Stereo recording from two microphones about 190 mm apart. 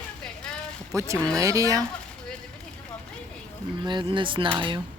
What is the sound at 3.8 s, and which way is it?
Speech, 25° right (ahead or behind).